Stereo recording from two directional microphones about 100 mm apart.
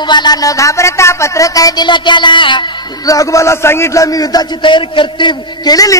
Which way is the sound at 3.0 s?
35° left (ahead or behind).